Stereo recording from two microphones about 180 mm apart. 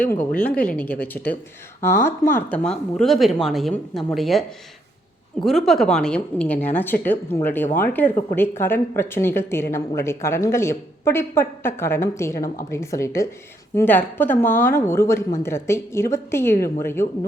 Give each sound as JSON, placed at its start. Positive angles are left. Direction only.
{"t": 0.0, "sound": "a woman's voice", "side_deg": 10}